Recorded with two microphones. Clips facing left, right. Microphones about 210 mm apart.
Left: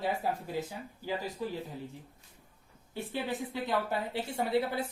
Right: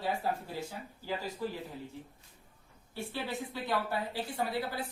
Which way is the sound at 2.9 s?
15° left (ahead or behind).